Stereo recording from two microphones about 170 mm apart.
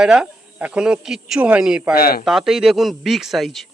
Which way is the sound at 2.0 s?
60° left (ahead or behind).